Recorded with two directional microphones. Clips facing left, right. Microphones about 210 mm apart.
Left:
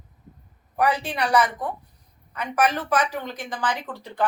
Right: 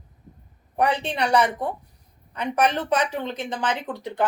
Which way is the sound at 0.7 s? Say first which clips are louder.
Even; 25° right (ahead or behind).